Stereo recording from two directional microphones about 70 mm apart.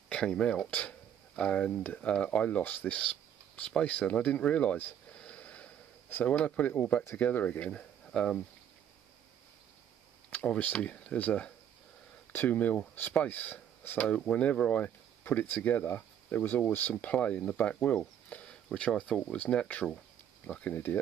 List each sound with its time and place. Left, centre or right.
0.1 s a sound: centre
1.4 s speech: centre
10.3 s speech: centre